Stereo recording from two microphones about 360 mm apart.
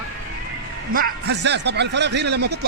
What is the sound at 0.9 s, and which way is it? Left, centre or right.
A man's voice, right.